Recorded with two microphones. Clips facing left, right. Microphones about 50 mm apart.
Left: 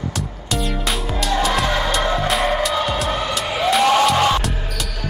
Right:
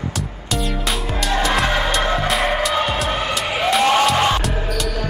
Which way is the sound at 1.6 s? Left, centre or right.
Centre.